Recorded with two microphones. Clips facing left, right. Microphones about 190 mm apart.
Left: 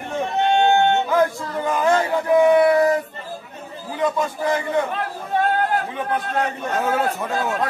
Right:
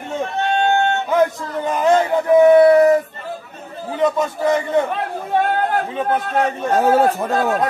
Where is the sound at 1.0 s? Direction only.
20° right (ahead or behind).